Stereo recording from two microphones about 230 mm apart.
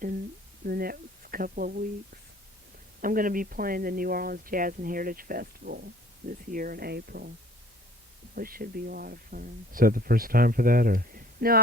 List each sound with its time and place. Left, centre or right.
0.6 s speech: right
3.0 s speech: right
8.4 s speech: right